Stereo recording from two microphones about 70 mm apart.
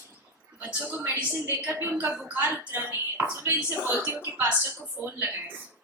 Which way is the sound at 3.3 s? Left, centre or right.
Right.